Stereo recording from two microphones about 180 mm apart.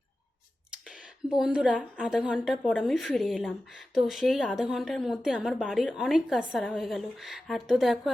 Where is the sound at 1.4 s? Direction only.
5° right (ahead or behind).